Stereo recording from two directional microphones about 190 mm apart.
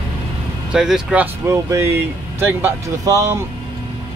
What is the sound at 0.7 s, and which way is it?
Speech, 5° right (ahead or behind).